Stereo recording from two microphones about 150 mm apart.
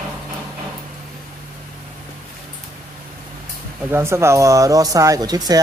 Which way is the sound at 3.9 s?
15° right (ahead or behind).